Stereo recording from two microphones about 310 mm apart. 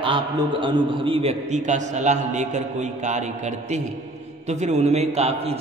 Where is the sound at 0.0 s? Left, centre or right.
Centre.